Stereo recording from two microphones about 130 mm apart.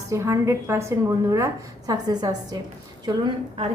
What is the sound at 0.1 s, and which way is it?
A woman's voice, 25° right (ahead or behind).